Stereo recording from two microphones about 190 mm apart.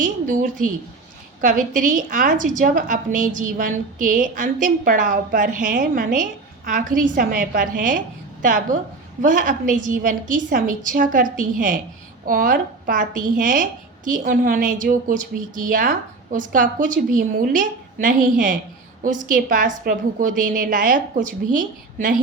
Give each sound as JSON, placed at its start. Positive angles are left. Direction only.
{"t": 0.0, "sound": "a woman's voice", "side_deg": -45}